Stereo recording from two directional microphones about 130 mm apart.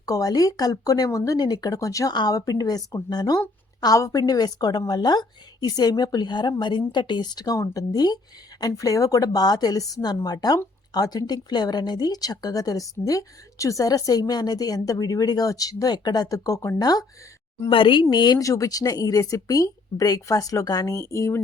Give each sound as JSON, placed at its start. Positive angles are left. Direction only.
{"t": 0.0, "sound": "a woman's voice", "side_deg": 25}
{"t": 17.7, "sound": "a woman's voice", "side_deg": 40}